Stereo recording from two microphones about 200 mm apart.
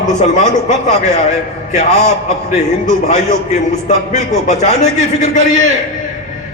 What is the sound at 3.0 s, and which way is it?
A man's voice, 35° left (ahead or behind).